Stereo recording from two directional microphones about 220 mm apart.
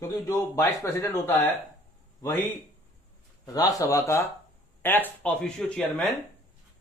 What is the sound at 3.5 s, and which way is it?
Speech, 15° left (ahead or behind).